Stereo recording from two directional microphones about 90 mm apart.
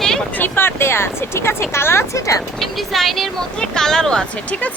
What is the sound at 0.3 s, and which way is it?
Speech, 25° left (ahead or behind).